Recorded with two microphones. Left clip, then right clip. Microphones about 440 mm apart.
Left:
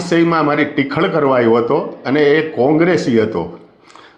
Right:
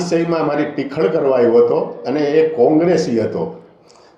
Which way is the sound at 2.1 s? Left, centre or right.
Left.